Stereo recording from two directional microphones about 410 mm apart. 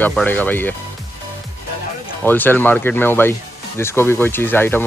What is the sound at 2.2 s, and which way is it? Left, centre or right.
Speech, centre.